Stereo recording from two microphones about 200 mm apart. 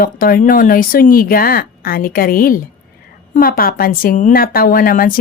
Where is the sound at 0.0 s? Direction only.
45° left (ahead or behind).